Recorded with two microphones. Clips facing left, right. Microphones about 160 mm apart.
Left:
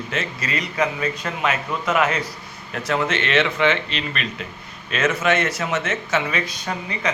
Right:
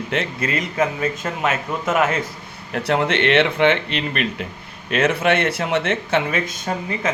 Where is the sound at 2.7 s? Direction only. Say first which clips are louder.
Right 3 dB; 60° right (ahead or behind).